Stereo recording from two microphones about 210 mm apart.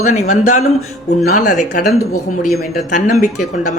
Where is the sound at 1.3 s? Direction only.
35° left (ahead or behind).